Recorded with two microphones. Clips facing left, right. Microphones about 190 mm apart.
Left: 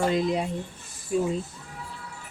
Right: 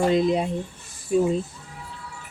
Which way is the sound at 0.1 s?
20° right (ahead or behind).